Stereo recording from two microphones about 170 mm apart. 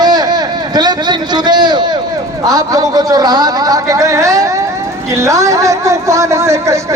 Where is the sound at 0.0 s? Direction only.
25° right (ahead or behind).